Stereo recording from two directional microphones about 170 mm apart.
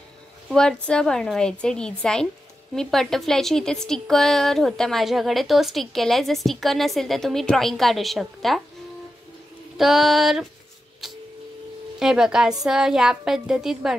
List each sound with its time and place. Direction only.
0.5 s a woman's voice: 5° left (ahead or behind)
9.8 s a woman's voice: centre (ahead or behind)
11.0 s printer: centre (ahead or behind)
12.0 s a woman's voice: 5° right (ahead or behind)